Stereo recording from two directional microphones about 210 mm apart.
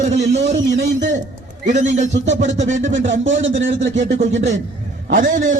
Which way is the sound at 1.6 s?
35° right (ahead or behind).